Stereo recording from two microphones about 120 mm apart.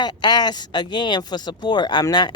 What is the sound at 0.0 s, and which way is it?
Speech, 35° left (ahead or behind).